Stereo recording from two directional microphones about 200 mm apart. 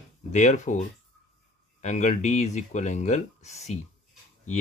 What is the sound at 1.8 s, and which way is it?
Speech, 35° left (ahead or behind).